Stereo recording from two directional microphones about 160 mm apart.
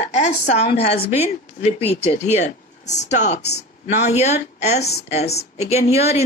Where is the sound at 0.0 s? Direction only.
45° left (ahead or behind).